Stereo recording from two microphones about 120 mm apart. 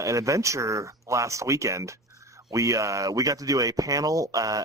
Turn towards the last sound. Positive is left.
turn(degrees=-30)  # may be behind; listen again after turning